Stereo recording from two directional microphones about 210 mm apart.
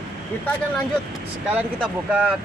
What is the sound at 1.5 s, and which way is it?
Speech, 5° right (ahead or behind).